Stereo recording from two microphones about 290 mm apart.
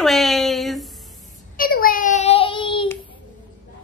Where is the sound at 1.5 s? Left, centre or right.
Left.